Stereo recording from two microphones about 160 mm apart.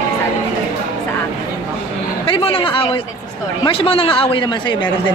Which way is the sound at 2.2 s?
35° left (ahead or behind).